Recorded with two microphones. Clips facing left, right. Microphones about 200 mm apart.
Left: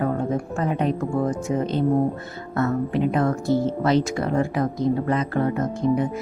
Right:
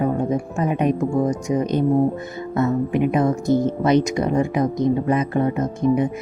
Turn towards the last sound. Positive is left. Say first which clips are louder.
# right 2 dB
turn(degrees=-20)  # may be behind; listen again after turning